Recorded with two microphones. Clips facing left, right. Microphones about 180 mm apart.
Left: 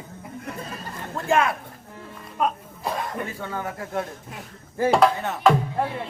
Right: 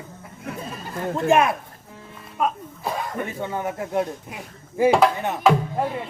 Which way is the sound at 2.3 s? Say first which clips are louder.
Right 1 dB; centre (ahead or behind).